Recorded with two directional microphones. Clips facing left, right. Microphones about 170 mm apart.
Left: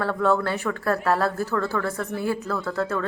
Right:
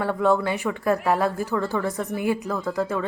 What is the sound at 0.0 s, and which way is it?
A woman's voice, 15° right (ahead or behind).